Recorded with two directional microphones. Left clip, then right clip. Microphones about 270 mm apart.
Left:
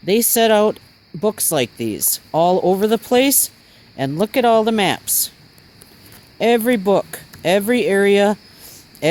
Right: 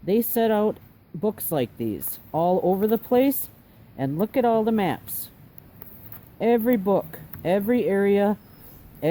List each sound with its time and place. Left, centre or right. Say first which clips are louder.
0.0 s speech: left 7 dB; left
6.4 s speech: left 6 dB; left